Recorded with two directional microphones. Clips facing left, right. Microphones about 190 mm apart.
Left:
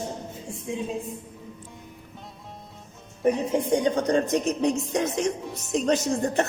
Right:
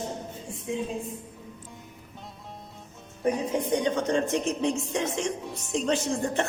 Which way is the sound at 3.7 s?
35° left (ahead or behind).